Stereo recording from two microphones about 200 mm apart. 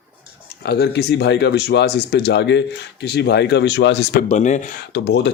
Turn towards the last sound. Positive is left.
turn(degrees=60)  # may be behind; listen again after turning